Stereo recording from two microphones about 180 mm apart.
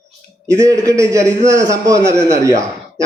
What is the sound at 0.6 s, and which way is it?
A man's voice, 20° right (ahead or behind).